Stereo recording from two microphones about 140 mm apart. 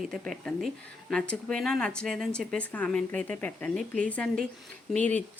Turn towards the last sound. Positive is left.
turn(degrees=-55)  # may be behind; listen again after turning